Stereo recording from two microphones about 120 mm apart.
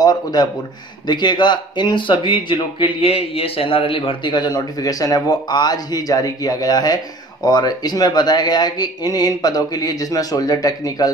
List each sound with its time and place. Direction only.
0.0 s speech: 35° left (ahead or behind)